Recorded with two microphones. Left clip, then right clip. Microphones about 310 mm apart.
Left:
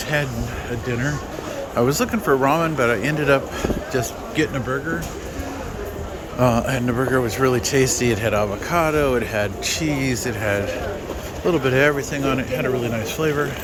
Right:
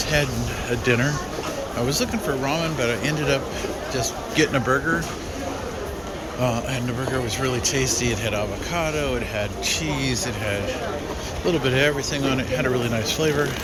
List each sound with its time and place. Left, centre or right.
0.9 s speech: centre
1.9 s speech: centre
6.4 s a man's voice: left